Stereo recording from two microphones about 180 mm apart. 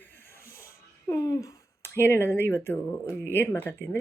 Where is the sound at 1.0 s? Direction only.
15° left (ahead or behind).